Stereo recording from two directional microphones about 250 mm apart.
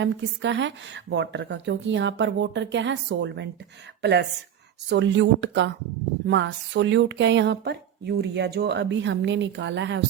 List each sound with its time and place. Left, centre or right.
0.0 s speech: right